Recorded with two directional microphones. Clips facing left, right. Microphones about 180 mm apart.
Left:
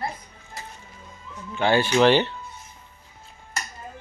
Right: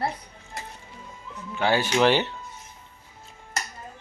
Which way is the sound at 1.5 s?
10° right (ahead or behind).